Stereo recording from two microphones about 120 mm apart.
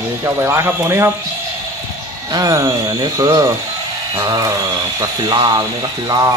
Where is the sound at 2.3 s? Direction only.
25° right (ahead or behind).